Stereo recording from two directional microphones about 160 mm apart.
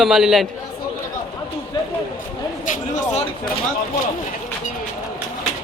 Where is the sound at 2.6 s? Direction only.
50° left (ahead or behind).